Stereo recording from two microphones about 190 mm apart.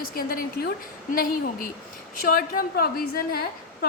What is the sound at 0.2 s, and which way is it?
Speech, 50° left (ahead or behind).